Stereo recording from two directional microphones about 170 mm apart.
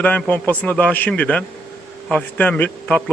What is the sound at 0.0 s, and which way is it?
A man's voice, 10° left (ahead or behind).